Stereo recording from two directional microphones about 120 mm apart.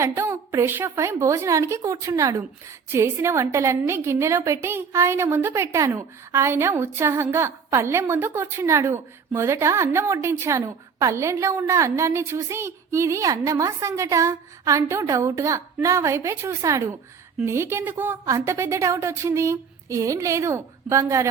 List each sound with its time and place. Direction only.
0.0 s a woman's voice: 20° right (ahead or behind)